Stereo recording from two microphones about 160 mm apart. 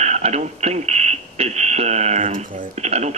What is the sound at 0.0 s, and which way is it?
Speech, 45° right (ahead or behind).